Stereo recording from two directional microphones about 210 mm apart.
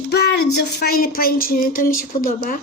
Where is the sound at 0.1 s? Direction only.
50° left (ahead or behind).